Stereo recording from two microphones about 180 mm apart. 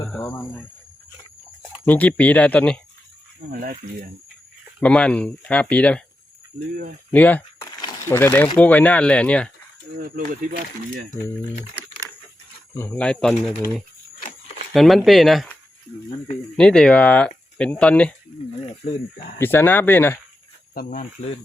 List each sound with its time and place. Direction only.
0.0 s cricket: 10° left (ahead or behind)
1.8 s speech: 10° left (ahead or behind)
3.5 s speech: 55° right (ahead or behind)
4.8 s speech: 5° left (ahead or behind)
7.1 s a sound: 10° left (ahead or behind)
8.0 s speech: 10° left (ahead or behind)
10.0 s speech: 50° right (ahead or behind)
12.7 s speech: 10° left (ahead or behind)
14.7 s speech: centre (ahead or behind)
16.6 s speech: 5° left (ahead or behind)
19.4 s speech: 10° left (ahead or behind)